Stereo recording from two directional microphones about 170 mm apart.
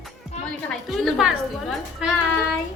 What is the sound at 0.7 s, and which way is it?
A woman's voice, centre (ahead or behind).